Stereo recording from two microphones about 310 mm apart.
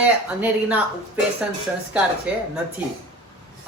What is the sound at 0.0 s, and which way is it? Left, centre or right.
A man's voice, centre.